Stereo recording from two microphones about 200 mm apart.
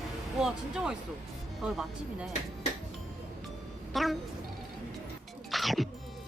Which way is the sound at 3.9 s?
Centre (ahead or behind).